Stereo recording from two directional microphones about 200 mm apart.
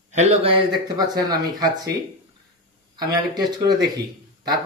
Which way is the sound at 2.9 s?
20° right (ahead or behind).